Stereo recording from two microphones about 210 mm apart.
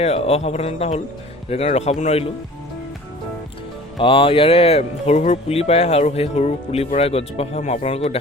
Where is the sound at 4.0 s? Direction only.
25° left (ahead or behind).